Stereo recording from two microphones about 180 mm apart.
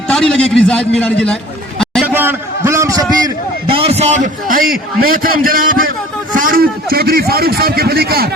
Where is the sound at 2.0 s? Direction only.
10° right (ahead or behind); by 5.6 s 50° right (ahead or behind).